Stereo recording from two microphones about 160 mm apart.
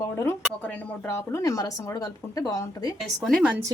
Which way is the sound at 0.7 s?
15° left (ahead or behind).